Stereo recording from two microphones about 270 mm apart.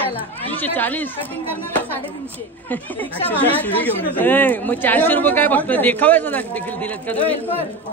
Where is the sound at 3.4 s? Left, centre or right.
Centre.